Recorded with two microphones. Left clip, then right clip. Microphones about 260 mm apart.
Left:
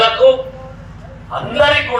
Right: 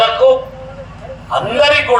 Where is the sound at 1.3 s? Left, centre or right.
Right.